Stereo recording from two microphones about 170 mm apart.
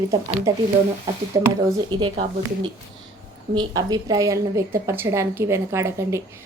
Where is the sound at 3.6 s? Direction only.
25° right (ahead or behind).